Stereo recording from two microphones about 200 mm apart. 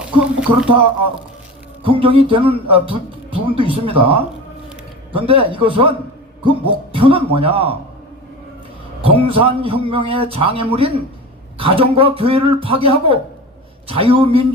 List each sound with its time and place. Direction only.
0.0 s speech: 5° right (ahead or behind)
1.8 s speech: 25° right (ahead or behind)
6.9 s speech: 30° right (ahead or behind)
9.0 s speech: 30° right (ahead or behind)